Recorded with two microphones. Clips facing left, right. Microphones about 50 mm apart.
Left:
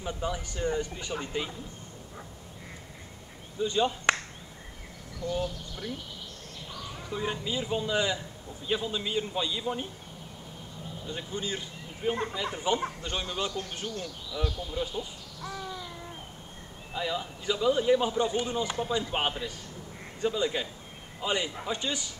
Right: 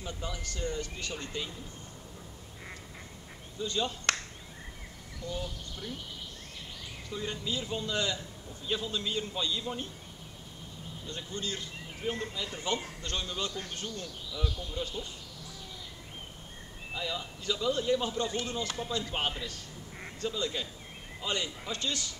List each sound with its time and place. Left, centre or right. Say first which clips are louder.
0.0 s speech: left 6 dB; left
3.5 s speech: left 6 dB; centre
5.3 s speech: left 6 dB; centre
7.1 s speech: left 3 dB; centre
11.1 s speech: left 3 dB; centre
16.9 s a man's voice: left 4 dB; centre